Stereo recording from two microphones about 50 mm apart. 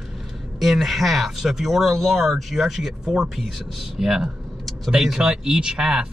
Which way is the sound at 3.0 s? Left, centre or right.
Centre.